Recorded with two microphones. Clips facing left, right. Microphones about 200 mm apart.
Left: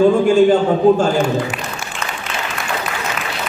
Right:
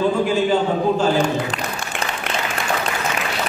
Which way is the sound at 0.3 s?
50° left (ahead or behind).